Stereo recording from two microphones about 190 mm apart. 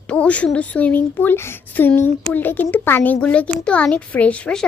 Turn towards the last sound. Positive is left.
turn(degrees=5)  # may be behind; listen again after turning